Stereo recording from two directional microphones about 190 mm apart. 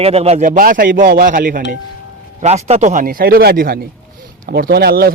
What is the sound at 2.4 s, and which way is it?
A man's voice, 35° right (ahead or behind).